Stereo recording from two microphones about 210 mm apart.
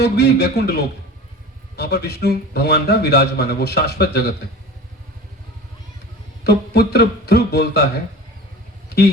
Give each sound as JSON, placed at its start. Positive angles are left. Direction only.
{"t": 0.0, "sound": "a man's voice", "side_deg": 50}
{"t": 6.4, "sound": "a man's voice", "side_deg": 50}